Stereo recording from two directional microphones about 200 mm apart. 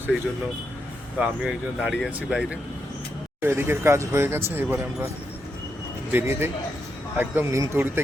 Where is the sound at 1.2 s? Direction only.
5° right (ahead or behind).